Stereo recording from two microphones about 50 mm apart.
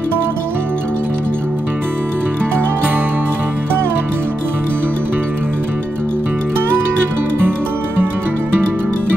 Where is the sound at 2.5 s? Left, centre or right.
Right.